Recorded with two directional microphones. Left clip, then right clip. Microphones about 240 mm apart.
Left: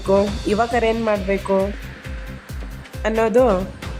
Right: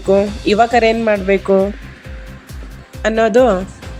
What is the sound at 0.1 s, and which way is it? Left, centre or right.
Speech, centre.